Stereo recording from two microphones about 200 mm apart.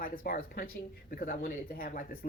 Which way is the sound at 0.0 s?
45° left (ahead or behind).